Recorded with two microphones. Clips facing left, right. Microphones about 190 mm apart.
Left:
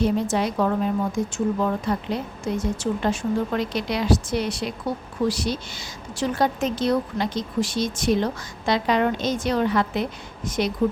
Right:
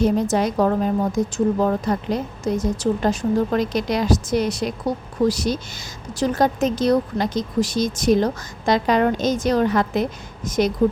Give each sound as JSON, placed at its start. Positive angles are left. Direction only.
{"t": 0.0, "sound": "a woman's voice", "side_deg": -45}